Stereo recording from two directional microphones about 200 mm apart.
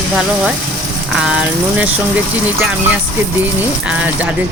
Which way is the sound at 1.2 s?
5° right (ahead or behind).